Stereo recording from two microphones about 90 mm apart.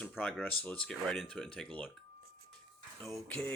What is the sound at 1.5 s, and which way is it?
Speech, 15° left (ahead or behind).